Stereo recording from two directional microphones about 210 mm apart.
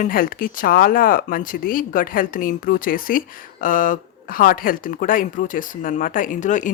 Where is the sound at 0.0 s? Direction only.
40° left (ahead or behind).